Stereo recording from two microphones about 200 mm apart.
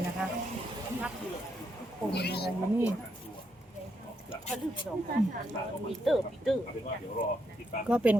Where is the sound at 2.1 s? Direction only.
55° left (ahead or behind).